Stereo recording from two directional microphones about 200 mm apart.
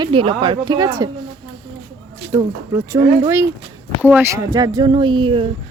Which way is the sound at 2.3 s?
15° right (ahead or behind).